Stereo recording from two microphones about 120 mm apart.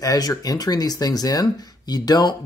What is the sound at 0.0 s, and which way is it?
Speech, 30° left (ahead or behind).